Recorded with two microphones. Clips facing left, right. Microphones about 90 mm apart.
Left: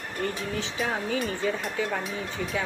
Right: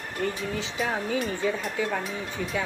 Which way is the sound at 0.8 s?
Centre (ahead or behind).